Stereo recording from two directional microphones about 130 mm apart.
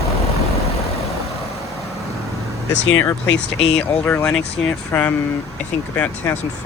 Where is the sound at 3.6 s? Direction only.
50° left (ahead or behind).